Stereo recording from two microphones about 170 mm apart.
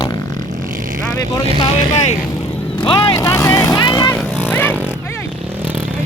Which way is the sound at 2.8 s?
25° left (ahead or behind).